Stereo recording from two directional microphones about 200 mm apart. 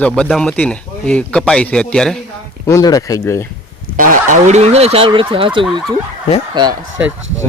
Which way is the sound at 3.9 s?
40° right (ahead or behind).